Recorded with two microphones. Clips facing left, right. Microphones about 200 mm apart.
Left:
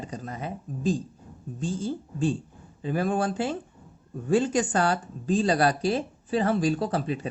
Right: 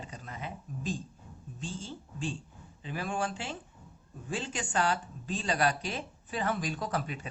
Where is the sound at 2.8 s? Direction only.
45° left (ahead or behind).